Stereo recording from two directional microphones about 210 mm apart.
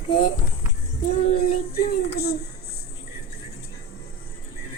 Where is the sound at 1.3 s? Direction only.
45° left (ahead or behind).